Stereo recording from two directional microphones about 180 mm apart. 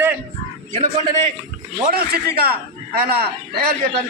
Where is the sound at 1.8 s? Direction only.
60° right (ahead or behind).